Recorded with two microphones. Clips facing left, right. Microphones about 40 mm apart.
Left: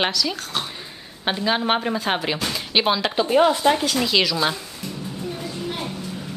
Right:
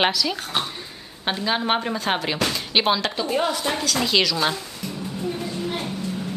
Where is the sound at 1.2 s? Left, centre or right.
Centre.